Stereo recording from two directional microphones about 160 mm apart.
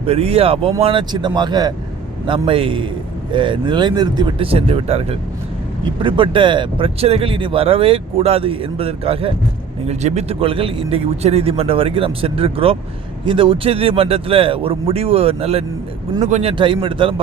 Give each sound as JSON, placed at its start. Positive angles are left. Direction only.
{"t": 0.0, "sound": "speech", "side_deg": -40}